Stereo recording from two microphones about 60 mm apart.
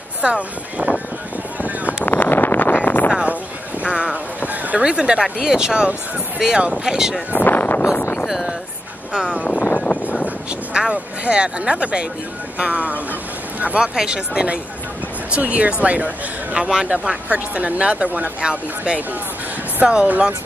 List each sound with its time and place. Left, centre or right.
0.2 s speech: centre
2.0 s vehicle: left
3.8 s boat: centre
4.6 s speech: centre
7.3 s a sound: left
7.8 s a sound: left
8.3 s a sound: centre
9.1 s speech: centre
9.4 s vehicle: left
10.2 s speech: centre